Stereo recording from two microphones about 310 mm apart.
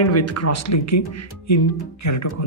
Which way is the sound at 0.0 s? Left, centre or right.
Left.